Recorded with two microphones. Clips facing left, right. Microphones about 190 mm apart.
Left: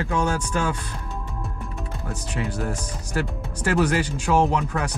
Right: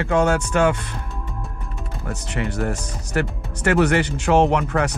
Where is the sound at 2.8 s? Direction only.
10° left (ahead or behind).